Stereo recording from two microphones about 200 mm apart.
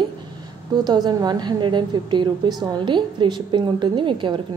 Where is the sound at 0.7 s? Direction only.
20° right (ahead or behind).